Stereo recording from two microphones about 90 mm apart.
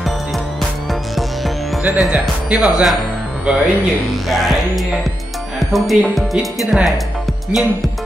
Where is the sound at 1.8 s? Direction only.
15° right (ahead or behind).